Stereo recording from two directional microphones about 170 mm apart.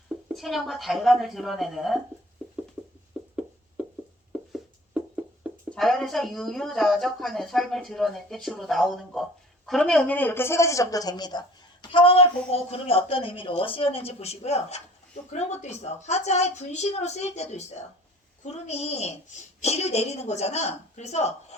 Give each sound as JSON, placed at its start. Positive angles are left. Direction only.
{"t": 0.3, "sound": "speech", "side_deg": 0}
{"t": 3.1, "sound": "a sound", "side_deg": -5}
{"t": 5.7, "sound": "speech", "side_deg": 0}